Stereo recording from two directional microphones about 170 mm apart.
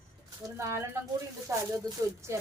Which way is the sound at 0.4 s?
15° right (ahead or behind).